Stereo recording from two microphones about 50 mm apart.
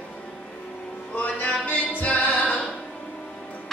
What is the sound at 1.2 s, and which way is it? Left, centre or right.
Music, left.